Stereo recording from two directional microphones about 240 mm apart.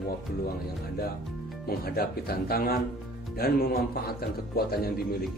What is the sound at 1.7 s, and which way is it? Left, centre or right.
Speech, left.